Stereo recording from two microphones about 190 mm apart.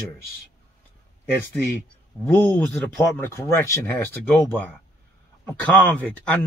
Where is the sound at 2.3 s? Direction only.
10° left (ahead or behind).